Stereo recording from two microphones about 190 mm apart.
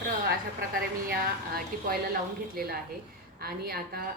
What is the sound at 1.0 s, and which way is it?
A woman's voice, 50° right (ahead or behind).